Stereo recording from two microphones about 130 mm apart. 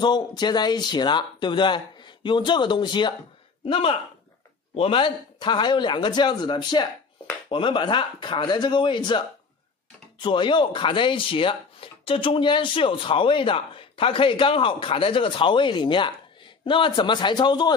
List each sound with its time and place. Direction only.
0.0 s speech: 35° left (ahead or behind)
10.2 s speech: 40° left (ahead or behind)